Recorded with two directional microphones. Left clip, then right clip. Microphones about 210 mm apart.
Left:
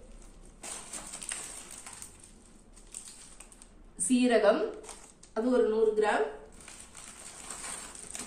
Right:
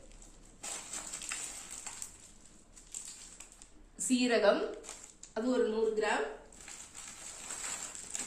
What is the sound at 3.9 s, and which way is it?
Speech, centre (ahead or behind).